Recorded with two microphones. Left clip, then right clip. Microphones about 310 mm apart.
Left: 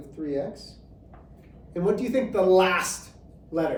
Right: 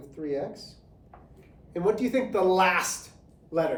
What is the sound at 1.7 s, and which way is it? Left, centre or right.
Speech, right.